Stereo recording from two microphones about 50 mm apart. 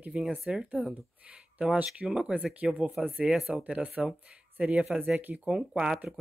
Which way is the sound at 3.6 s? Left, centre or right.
Right.